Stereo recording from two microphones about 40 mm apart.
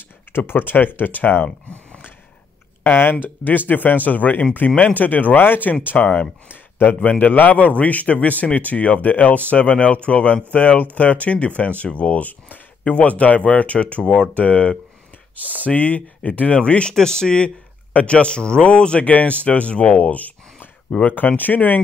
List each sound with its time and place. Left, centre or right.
0.5 s speech: left
2.8 s speech: left
5.3 s speech: left
6.5 s a sound: left
7.0 s a man's voice: left
9.0 s a man's voice: left
14.0 s speech: centre
14.3 s a man's voice: left
16.9 s speech: centre
17.9 s a man's voice: left